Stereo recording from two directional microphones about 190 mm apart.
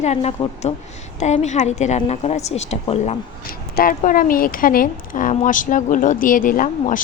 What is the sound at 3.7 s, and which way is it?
Speech, 45° left (ahead or behind).